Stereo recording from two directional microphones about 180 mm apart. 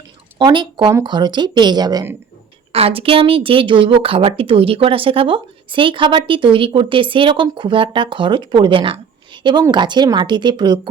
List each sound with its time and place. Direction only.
0.3 s a woman's voice: 25° right (ahead or behind)
2.7 s a woman's voice: 30° right (ahead or behind)